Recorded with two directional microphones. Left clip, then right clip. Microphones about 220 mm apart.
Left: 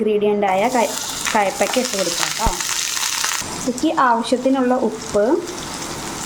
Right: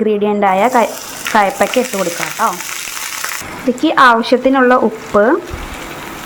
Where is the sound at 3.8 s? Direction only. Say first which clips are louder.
Right 7 dB; 20° right (ahead or behind).